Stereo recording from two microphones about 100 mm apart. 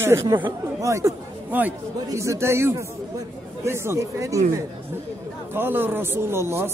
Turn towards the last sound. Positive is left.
turn(degrees=-25)  # may be behind; listen again after turning